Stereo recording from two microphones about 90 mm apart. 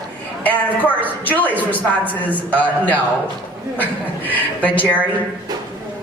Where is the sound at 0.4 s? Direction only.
20° left (ahead or behind).